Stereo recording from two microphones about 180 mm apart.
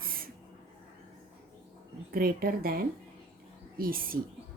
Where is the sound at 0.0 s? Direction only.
55° right (ahead or behind).